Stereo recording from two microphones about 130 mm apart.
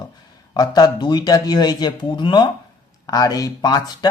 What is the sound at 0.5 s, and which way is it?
Speech, 30° left (ahead or behind).